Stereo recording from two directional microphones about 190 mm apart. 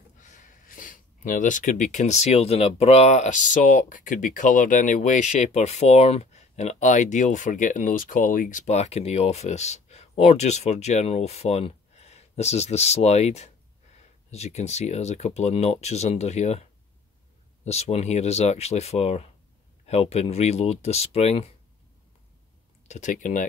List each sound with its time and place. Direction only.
0.2 s speech: 40° left (ahead or behind)
17.6 s speech: 35° left (ahead or behind)
22.8 s speech: 40° left (ahead or behind)